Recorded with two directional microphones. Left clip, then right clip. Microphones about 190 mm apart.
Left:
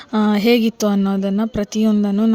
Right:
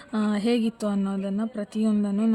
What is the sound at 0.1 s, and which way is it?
A woman's voice, 40° left (ahead or behind).